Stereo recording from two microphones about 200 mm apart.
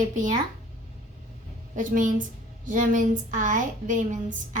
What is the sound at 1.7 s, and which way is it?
A woman's voice, 40° right (ahead or behind).